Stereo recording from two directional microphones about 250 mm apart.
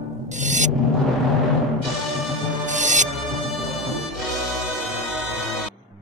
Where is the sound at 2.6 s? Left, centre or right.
Right.